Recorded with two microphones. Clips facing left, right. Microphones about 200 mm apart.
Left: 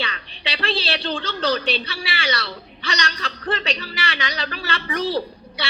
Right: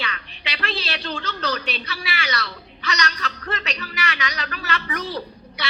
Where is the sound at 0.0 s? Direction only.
30° left (ahead or behind).